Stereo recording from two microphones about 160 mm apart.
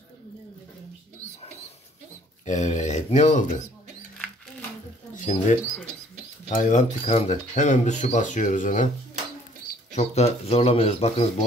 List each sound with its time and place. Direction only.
2.4 s speech: 50° left (ahead or behind)
5.1 s speech: 50° left (ahead or behind)
9.9 s speech: 40° left (ahead or behind)